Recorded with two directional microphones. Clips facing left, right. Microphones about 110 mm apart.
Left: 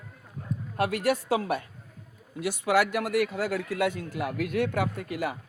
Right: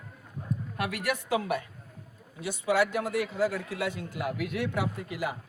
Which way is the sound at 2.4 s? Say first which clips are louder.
Left 2 dB; 70° left (ahead or behind).